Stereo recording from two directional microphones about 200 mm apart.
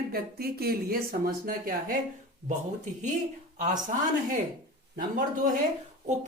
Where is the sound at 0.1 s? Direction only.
50° right (ahead or behind).